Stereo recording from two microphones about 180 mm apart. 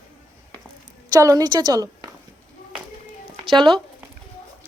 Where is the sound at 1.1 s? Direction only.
20° right (ahead or behind).